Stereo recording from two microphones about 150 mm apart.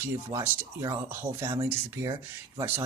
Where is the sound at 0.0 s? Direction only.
15° right (ahead or behind).